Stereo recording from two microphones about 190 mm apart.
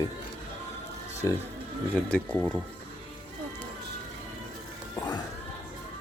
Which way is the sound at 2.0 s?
5° left (ahead or behind).